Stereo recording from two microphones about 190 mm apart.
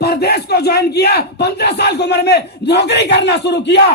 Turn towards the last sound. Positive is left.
turn(degrees=60)  # may be behind; listen again after turning